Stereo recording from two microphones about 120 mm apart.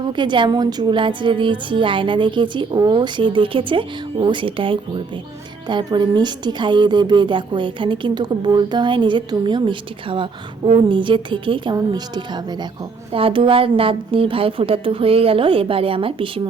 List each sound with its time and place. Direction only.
0.1 s a woman's voice: 40° right (ahead or behind)
13.1 s a woman's voice: 45° right (ahead or behind)